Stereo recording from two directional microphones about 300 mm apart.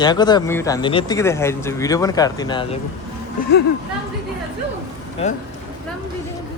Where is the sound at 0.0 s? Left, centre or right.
Centre.